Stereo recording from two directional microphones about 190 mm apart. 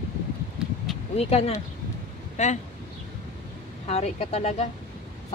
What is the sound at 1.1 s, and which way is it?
Speech, 35° left (ahead or behind).